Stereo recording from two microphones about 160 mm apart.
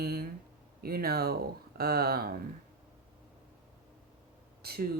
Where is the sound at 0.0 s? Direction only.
75° right (ahead or behind).